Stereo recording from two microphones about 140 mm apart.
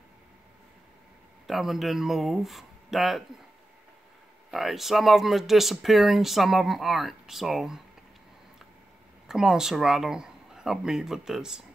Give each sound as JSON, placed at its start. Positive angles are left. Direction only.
{"t": 1.5, "sound": "speech", "side_deg": 0}
{"t": 4.5, "sound": "speech", "side_deg": 0}
{"t": 9.3, "sound": "speech", "side_deg": -5}